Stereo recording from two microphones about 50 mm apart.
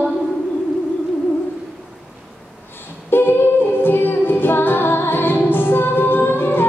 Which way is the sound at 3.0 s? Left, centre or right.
Left.